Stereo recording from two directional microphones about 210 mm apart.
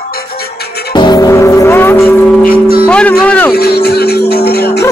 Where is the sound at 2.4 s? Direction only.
45° left (ahead or behind).